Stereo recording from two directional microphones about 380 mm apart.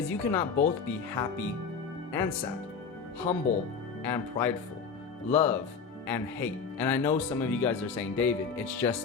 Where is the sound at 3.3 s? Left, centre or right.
Centre.